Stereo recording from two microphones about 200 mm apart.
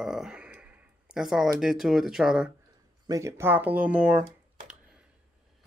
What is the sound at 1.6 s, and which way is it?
Speech, centre (ahead or behind).